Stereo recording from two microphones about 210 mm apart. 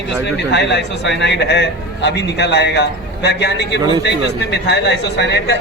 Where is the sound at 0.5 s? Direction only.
55° left (ahead or behind).